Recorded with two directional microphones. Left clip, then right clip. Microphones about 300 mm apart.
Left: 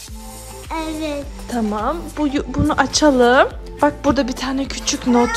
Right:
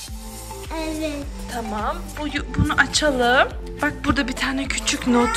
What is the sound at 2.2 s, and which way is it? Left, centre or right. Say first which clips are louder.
Speech: left 7 dB; left.